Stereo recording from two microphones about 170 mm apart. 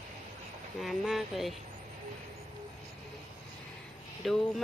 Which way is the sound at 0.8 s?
Centre (ahead or behind).